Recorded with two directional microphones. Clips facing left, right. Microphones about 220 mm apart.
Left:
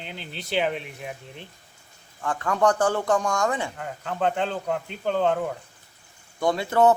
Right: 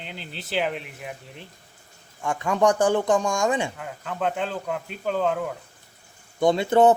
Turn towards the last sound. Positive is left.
turn(degrees=-20)  # may be behind; listen again after turning